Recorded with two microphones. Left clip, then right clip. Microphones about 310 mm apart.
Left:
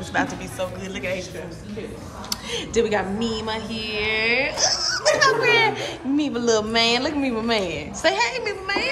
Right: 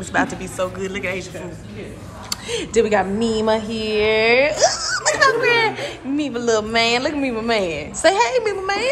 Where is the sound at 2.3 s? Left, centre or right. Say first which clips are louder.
Right 4 dB; centre.